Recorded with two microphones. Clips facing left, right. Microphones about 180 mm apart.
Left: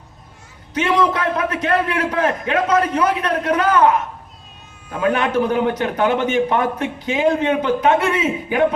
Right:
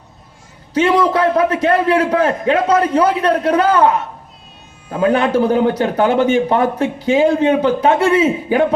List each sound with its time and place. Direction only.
0.7 s a man's voice: 30° right (ahead or behind)